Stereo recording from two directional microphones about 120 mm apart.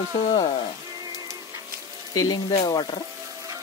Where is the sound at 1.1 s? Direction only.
25° right (ahead or behind).